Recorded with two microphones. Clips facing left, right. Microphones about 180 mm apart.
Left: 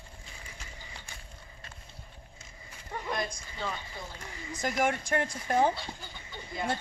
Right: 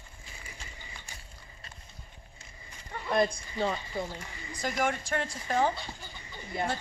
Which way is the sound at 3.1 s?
55° right (ahead or behind).